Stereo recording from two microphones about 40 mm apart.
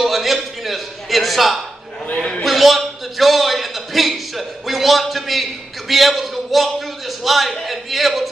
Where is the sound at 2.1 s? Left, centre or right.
Centre.